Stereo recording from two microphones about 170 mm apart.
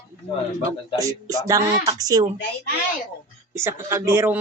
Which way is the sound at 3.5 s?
15° right (ahead or behind).